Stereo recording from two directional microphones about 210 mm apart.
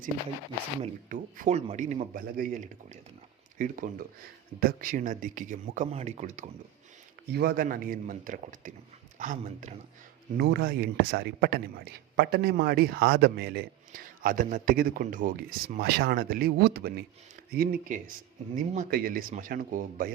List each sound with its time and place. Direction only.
0.8 s speech: 35° right (ahead or behind)
7.3 s speech: 50° right (ahead or behind)
10.3 s a man's voice: 50° right (ahead or behind)